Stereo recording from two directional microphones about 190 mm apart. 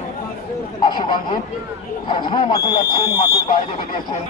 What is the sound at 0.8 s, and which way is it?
Speech, 25° left (ahead or behind).